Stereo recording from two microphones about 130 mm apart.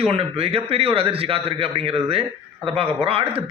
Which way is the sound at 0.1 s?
45° right (ahead or behind).